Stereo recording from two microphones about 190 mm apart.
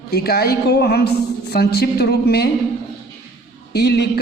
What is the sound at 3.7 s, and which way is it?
Speech, 60° left (ahead or behind).